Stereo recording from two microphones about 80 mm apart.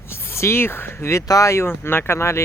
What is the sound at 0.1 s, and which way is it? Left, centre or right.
Speech, left.